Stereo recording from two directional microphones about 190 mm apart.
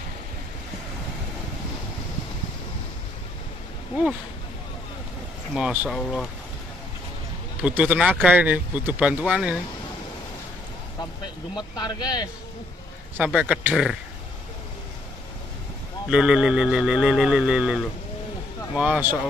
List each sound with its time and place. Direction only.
5.5 s speech: 5° right (ahead or behind)
7.6 s speech: 5° right (ahead or behind)
11.5 s speech: 20° left (ahead or behind)
13.2 s speech: 5° right (ahead or behind)
16.1 s speech: 5° right (ahead or behind)
18.8 s speech: 10° right (ahead or behind)